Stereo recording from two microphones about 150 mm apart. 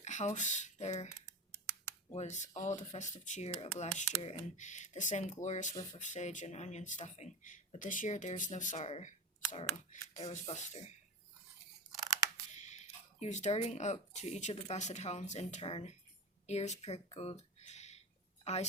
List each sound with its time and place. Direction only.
0.0 s speech: 50° left (ahead or behind)
1.1 s computer keyboard: 20° left (ahead or behind)
2.1 s speech: 50° left (ahead or behind)
12.5 s speech: 50° left (ahead or behind)